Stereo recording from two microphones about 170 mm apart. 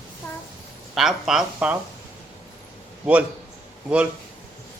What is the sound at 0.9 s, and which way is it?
Speech, 5° right (ahead or behind).